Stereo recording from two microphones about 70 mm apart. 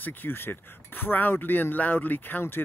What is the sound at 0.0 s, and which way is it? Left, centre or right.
Speech, left.